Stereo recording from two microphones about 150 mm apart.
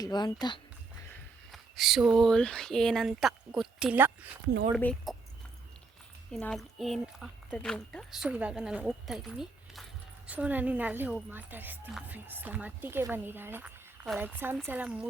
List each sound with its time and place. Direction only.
0.0 s speech: 25° left (ahead or behind)
1.5 s speech: centre (ahead or behind)
5.1 s a sound: centre (ahead or behind)
6.3 s speech: 5° left (ahead or behind)